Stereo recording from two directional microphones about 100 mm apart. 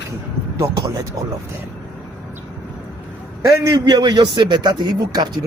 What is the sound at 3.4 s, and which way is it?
Speech, 30° right (ahead or behind).